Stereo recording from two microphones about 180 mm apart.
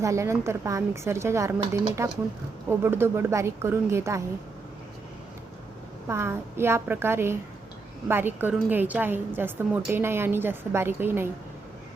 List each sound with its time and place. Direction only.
0.0 s a woman's voice: 15° right (ahead or behind)
6.1 s a woman's voice: 15° right (ahead or behind)